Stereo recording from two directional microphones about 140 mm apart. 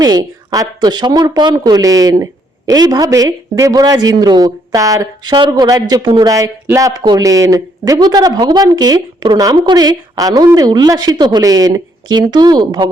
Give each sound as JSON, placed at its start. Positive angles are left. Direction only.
{"t": 0.0, "sound": "speech", "side_deg": -25}